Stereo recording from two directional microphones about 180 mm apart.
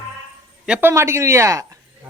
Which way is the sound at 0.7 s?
10° right (ahead or behind).